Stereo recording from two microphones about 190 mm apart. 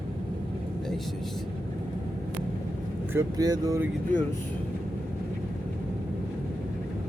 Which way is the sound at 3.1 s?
20° right (ahead or behind).